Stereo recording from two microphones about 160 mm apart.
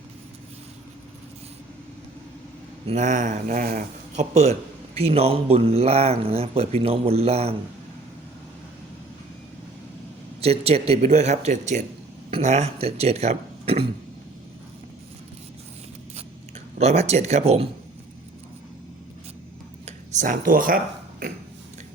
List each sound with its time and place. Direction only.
2.8 s speech: 50° right (ahead or behind)
4.1 s speech: 45° right (ahead or behind)
10.4 s speech: 40° right (ahead or behind)
16.7 s speech: 40° right (ahead or behind)
19.8 s a sound: 45° right (ahead or behind)